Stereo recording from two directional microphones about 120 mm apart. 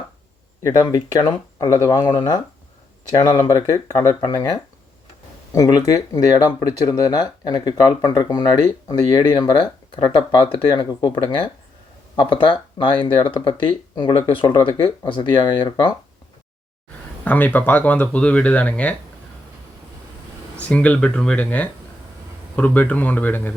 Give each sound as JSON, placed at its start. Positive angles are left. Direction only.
{"t": 0.6, "sound": "speech", "side_deg": 30}
{"t": 1.9, "sound": "speech", "side_deg": 40}
{"t": 17.2, "sound": "speech", "side_deg": 15}
{"t": 20.6, "sound": "speech", "side_deg": 10}